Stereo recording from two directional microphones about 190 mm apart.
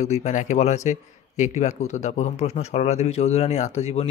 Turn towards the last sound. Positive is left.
turn(degrees=35)  # may be behind; listen again after turning